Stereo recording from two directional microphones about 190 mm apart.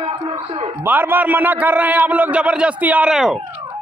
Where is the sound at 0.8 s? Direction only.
10° right (ahead or behind).